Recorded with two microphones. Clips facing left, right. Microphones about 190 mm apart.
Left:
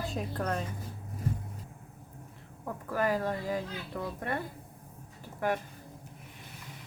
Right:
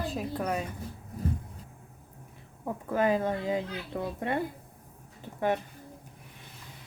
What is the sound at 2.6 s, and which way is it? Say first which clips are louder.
A child's voice: right 4 dB; 20° right (ahead or behind).